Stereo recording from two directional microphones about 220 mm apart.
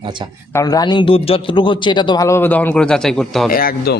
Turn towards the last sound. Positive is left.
turn(degrees=45)  # may be behind; listen again after turning